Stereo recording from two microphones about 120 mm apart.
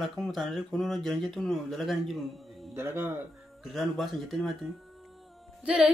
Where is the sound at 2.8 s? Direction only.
20° right (ahead or behind).